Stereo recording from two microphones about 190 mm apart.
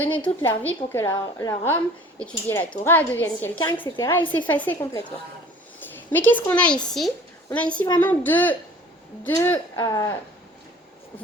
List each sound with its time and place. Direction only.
0.2 s a woman's voice: 10° left (ahead or behind)
3.7 s a woman's voice: 25° left (ahead or behind)
4.3 s a woman's voice: 10° left (ahead or behind)
6.1 s a woman's voice: 10° left (ahead or behind)